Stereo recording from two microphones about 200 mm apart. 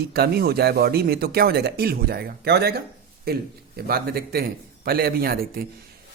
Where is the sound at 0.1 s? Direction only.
50° right (ahead or behind).